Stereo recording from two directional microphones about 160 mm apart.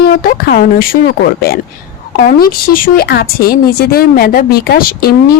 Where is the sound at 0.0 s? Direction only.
70° left (ahead or behind).